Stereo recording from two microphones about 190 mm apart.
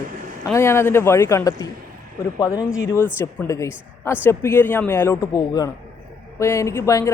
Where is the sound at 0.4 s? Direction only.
15° left (ahead or behind).